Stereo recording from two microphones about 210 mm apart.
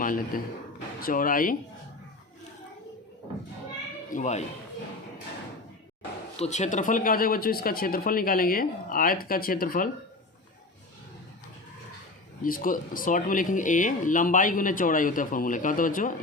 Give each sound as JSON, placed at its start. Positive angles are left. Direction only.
{"t": 0.0, "sound": "a man's voice", "side_deg": 40}
{"t": 4.1, "sound": "speech", "side_deg": 35}
{"t": 6.3, "sound": "speech", "side_deg": 30}
{"t": 12.4, "sound": "speech", "side_deg": 40}